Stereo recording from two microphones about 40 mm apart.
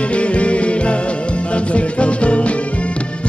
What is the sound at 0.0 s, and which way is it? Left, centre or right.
Music, left.